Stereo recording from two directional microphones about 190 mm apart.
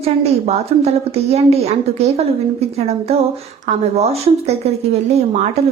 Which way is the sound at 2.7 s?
35° right (ahead or behind).